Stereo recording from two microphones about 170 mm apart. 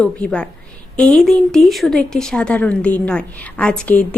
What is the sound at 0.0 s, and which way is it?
A woman's voice, 5° left (ahead or behind).